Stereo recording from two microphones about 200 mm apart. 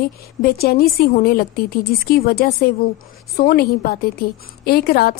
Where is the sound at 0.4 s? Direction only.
50° left (ahead or behind).